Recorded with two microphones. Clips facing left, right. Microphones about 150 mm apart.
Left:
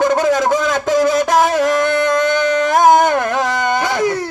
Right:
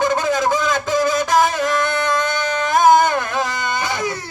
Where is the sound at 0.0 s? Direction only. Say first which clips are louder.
Left 4 dB; 80° left.